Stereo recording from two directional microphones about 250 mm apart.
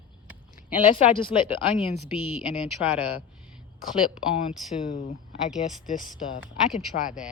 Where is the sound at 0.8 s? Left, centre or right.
Left.